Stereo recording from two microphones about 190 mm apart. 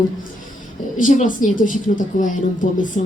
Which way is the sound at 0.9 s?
40° left (ahead or behind).